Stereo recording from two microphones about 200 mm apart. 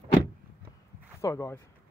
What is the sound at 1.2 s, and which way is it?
Speech, 15° left (ahead or behind).